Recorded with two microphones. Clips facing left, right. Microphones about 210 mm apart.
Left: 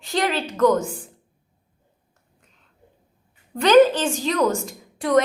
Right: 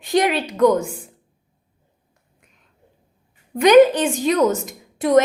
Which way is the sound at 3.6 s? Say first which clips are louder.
Right 3 dB; 15° right (ahead or behind).